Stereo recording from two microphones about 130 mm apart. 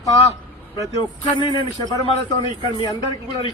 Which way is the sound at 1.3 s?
35° left (ahead or behind).